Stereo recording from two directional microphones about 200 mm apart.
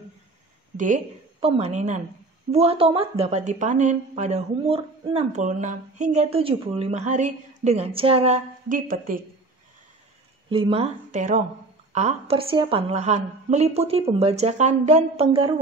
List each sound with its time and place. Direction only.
0.7 s a woman's voice: 40° right (ahead or behind)
10.5 s a woman's voice: 25° right (ahead or behind)